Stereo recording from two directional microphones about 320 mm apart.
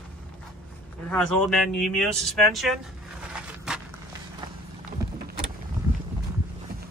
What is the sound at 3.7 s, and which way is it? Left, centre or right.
Walk, centre.